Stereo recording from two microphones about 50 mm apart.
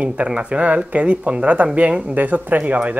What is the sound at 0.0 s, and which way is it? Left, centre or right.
Speech, right.